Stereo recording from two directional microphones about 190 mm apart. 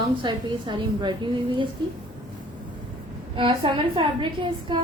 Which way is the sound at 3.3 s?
25° right (ahead or behind).